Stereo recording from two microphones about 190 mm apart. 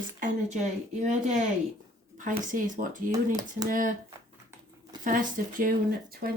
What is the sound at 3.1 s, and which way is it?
Speech, 20° right (ahead or behind).